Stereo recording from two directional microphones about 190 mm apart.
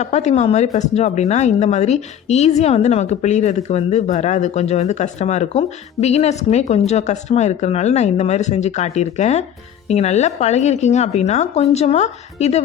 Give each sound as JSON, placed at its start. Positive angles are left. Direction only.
{"t": 0.0, "sound": "speech", "side_deg": 35}